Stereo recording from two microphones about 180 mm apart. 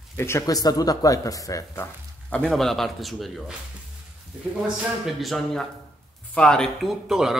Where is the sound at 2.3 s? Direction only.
5° left (ahead or behind).